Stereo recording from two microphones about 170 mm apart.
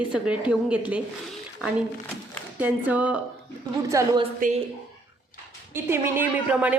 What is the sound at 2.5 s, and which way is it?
Speech, 10° right (ahead or behind).